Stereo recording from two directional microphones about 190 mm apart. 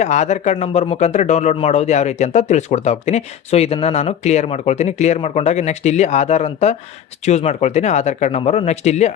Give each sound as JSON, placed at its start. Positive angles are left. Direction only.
{"t": 0.0, "sound": "a man's voice", "side_deg": 40}